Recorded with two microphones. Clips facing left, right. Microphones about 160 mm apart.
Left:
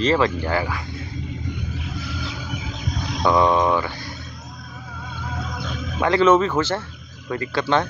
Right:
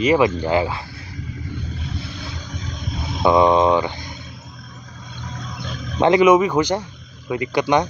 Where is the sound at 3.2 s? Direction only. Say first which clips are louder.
Right 3 dB; 20° right (ahead or behind).